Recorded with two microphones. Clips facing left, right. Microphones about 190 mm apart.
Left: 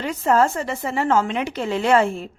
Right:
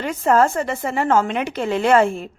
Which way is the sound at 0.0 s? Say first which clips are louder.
Right 2 dB; 50° right (ahead or behind).